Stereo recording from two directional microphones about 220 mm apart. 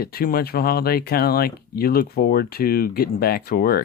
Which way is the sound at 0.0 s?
45° left (ahead or behind).